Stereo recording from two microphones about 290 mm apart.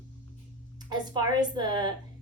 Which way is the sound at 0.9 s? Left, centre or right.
Centre.